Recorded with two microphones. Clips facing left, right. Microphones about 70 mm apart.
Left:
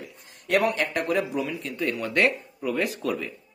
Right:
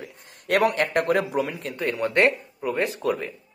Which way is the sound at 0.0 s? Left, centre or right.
Right.